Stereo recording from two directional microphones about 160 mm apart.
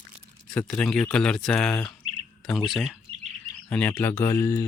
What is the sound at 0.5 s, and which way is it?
Speech, 5° left (ahead or behind).